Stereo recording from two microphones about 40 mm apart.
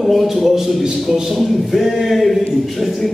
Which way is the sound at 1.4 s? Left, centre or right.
Centre.